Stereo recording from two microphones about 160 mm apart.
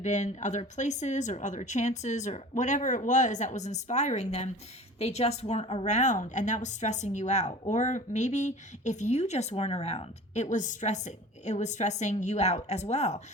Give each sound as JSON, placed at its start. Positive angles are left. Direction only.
{"t": 0.0, "sound": "speech", "side_deg": 50}